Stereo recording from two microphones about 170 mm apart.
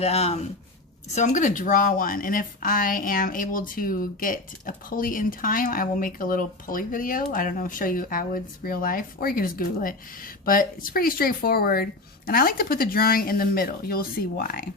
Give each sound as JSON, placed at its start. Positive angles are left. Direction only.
{"t": 0.0, "sound": "speech", "side_deg": 40}